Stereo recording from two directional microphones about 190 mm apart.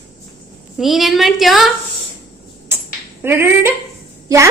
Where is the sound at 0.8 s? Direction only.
Centre (ahead or behind).